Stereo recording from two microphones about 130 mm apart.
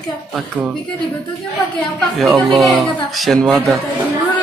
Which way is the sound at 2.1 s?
5° left (ahead or behind).